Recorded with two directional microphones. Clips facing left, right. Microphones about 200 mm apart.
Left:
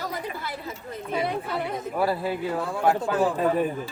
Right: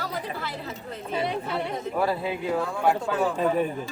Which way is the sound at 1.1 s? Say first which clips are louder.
Even; 5° left (ahead or behind).